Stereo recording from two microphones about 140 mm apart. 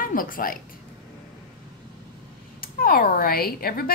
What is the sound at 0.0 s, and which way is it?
Speech, 85° left.